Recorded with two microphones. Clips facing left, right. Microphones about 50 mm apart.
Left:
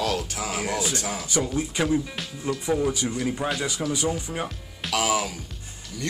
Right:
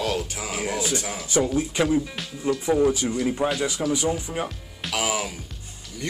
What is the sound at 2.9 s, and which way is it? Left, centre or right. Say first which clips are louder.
Speech: right 3 dB; right.